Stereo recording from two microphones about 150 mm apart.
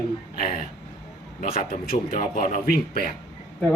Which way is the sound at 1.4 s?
55° left (ahead or behind).